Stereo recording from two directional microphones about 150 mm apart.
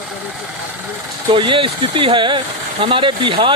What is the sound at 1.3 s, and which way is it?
Speech, 30° right (ahead or behind).